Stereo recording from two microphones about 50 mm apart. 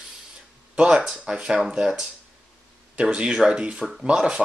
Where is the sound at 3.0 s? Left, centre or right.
Right.